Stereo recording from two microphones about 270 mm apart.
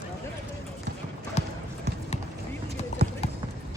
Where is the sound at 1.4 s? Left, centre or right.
Left.